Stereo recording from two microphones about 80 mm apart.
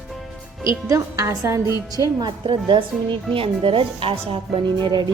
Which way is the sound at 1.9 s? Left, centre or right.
Right.